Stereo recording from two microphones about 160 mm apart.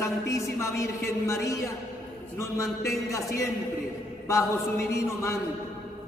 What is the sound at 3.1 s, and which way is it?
A woman's voice, 20° left (ahead or behind).